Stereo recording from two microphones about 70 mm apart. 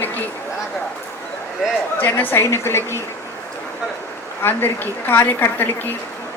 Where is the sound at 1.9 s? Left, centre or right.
Left.